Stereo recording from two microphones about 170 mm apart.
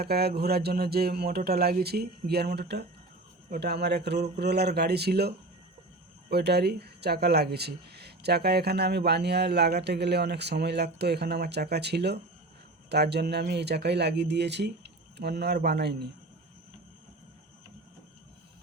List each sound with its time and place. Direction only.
0.0 s speech: 65° right (ahead or behind)
6.3 s speech: 75° right (ahead or behind)